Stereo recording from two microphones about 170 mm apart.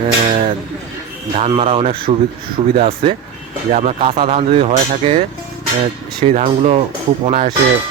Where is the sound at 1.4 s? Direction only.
35° right (ahead or behind).